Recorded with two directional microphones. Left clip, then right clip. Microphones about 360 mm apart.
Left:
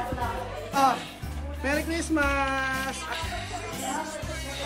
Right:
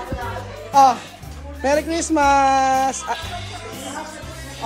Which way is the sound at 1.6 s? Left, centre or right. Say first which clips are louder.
Right 9 dB; centre.